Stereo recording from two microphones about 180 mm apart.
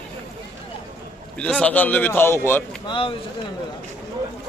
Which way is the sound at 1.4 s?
5° left (ahead or behind).